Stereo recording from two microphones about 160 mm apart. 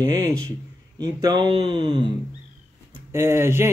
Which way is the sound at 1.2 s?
25° right (ahead or behind).